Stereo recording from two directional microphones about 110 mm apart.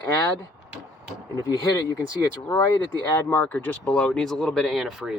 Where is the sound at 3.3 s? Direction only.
15° left (ahead or behind); by 5.1 s 5° right (ahead or behind).